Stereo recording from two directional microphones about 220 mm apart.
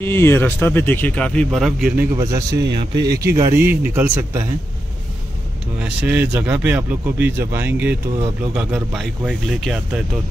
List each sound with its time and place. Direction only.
0.0 s speech: 10° left (ahead or behind); by 4.4 s 10° right (ahead or behind)
5.8 s speech: 5° right (ahead or behind)